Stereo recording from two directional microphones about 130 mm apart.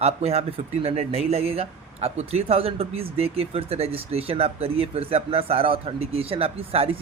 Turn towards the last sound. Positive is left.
turn(degrees=-50)  # may be behind; listen again after turning